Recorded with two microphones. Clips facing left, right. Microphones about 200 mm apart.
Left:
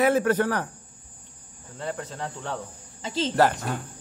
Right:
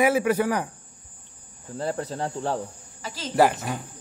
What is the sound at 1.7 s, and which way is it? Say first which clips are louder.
Cricket: right 5 dB; 40° right (ahead or behind).